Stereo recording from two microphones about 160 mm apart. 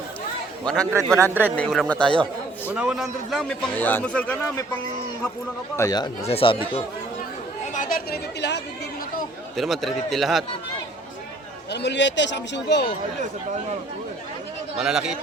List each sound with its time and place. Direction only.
0.9 s a man's voice: 15° right (ahead or behind)
1.5 s a man's voice: centre (ahead or behind)
2.7 s a man's voice: 5° right (ahead or behind)
5.7 s speech: 20° left (ahead or behind)
6.2 s speech: 35° left (ahead or behind)
7.7 s speech: 55° left (ahead or behind); by 8.6 s 90° left
9.6 s a man's voice: centre (ahead or behind)
11.7 s speech: 90° left
14.8 s a man's voice: 5° right (ahead or behind)